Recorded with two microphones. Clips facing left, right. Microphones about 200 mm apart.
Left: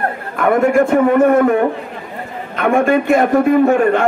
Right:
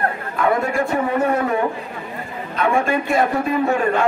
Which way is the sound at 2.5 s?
60° left (ahead or behind).